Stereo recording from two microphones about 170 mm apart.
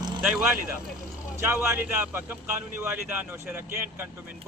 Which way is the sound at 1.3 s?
15° right (ahead or behind).